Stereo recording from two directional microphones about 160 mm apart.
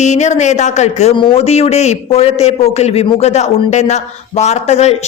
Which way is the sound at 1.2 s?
35° left (ahead or behind).